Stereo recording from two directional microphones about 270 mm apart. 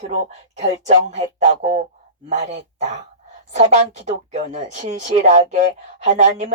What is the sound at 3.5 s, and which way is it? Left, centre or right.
Speech, right.